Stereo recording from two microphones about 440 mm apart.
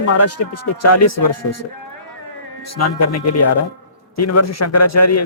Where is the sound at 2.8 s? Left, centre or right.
Left.